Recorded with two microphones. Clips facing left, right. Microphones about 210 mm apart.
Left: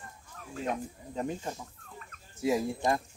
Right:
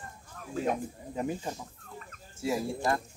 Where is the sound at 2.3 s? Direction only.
20° left (ahead or behind).